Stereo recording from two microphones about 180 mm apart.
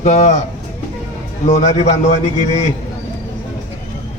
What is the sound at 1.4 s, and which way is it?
A man's voice, 40° left (ahead or behind).